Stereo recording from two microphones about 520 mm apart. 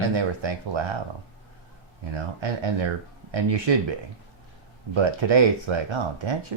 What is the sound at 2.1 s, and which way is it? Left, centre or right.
Speech, right.